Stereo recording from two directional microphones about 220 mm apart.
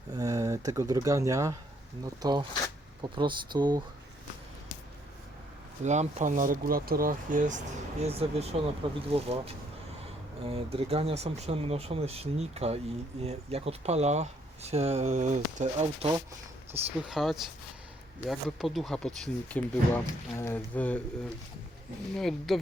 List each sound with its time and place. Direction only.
0.1 s speech: 15° right (ahead or behind)
5.8 s speech: 30° right (ahead or behind)
16.7 s speech: 5° right (ahead or behind)
22.1 s speech: centre (ahead or behind)